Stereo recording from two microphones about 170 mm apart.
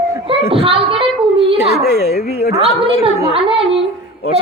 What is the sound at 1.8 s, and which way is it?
Speech, 70° left (ahead or behind).